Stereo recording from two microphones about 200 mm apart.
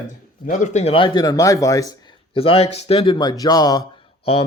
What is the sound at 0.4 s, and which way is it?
Speech, 35° left (ahead or behind).